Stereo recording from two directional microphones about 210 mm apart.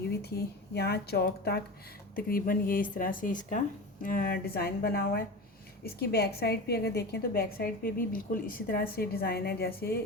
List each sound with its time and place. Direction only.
0.1 s a woman's voice: 50° left (ahead or behind)